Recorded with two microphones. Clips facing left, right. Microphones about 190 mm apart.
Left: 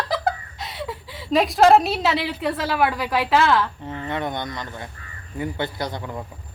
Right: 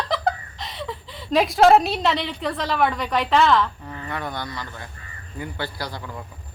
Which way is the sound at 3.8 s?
25° left (ahead or behind).